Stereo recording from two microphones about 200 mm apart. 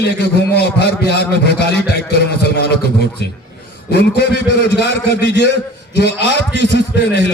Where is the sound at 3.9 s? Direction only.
55° left (ahead or behind).